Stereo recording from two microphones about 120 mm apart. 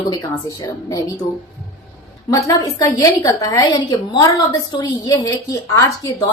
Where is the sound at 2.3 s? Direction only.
30° left (ahead or behind).